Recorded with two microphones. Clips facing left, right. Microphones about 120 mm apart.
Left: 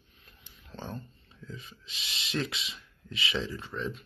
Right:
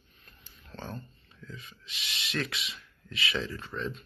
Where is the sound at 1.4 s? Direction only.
25° left (ahead or behind).